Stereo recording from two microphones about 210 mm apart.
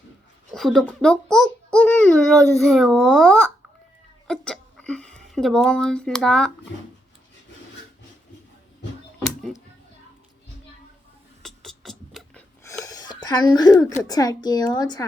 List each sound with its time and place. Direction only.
0.5 s a child's voice: centre (ahead or behind)
11.4 s music: centre (ahead or behind)
12.6 s a sound: 15° left (ahead or behind)
14.1 s a woman's voice: 20° left (ahead or behind)